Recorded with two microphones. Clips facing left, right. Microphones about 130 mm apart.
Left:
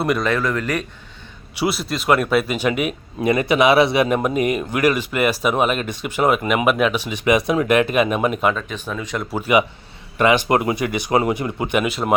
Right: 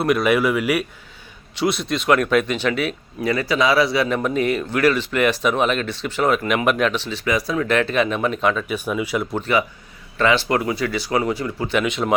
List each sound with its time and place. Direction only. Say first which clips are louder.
0.0 s speech: right 2 dB; centre (ahead or behind)
1.5 s speech: right 1 dB; 5° left (ahead or behind)
8.5 s speech: right 4 dB; 10° right (ahead or behind)
9.3 s speech: left 8 dB; 10° left (ahead or behind)
11.8 s speech: right 1 dB; 5° left (ahead or behind)